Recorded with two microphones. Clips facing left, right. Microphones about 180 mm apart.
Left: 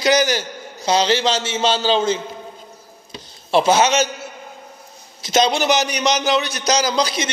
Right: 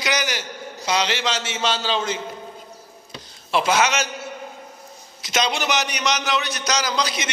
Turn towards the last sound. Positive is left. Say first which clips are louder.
# left 5 dB
turn(degrees=35)  # may be behind; listen again after turning